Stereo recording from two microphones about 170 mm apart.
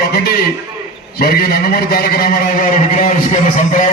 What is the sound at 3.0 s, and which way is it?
Speech, 50° left (ahead or behind).